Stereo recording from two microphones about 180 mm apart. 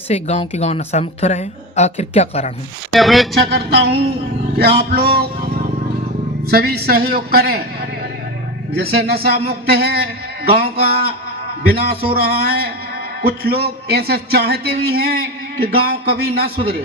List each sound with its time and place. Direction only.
0.1 s a woman's voice: 35° left (ahead or behind)
2.9 s speech: centre (ahead or behind)
3.4 s a man's voice: 60° right (ahead or behind)
6.5 s a man's voice: 60° right (ahead or behind)
8.8 s a man's voice: 60° right (ahead or behind)